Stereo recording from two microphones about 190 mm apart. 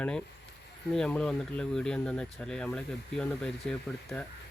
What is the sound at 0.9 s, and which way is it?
Speech, 5° left (ahead or behind).